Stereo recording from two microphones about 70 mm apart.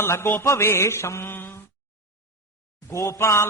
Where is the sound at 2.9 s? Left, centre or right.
Left.